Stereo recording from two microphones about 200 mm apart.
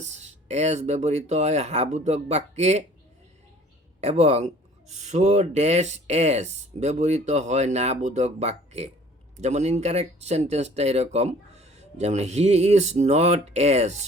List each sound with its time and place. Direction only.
0.0 s speech: 35° right (ahead or behind)
4.0 s speech: 30° right (ahead or behind)